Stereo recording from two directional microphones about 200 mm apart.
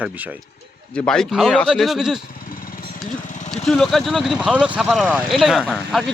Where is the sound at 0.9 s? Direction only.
5° left (ahead or behind).